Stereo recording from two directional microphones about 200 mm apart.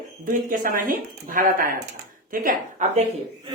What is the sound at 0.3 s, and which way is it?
Speech, 40° right (ahead or behind).